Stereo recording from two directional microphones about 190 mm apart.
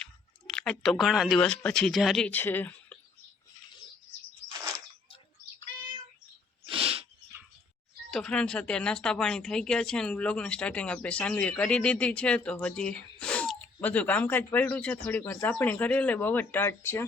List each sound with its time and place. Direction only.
0.0 s speech: 5° left (ahead or behind)
6.7 s a sound: 30° right (ahead or behind)
8.1 s speech: 5° left (ahead or behind)